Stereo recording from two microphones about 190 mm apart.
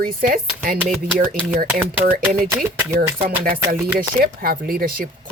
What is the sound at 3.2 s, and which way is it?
Speech, 50° right (ahead or behind).